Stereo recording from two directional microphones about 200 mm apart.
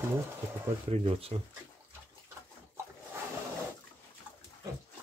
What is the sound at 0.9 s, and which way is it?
Speech, 30° right (ahead or behind).